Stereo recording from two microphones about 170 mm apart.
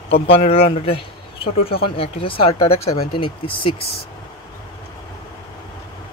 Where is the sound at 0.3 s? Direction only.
35° left (ahead or behind).